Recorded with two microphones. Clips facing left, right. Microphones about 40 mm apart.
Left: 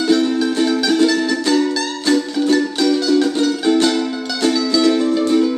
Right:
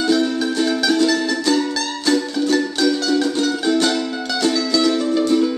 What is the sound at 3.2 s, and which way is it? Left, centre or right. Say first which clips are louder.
Music: left 3 dB; centre.